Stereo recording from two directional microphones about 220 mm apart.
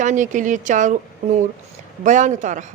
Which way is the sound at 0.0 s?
35° right (ahead or behind).